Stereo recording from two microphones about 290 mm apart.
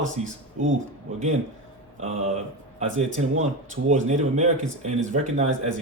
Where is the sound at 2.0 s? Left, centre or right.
Right.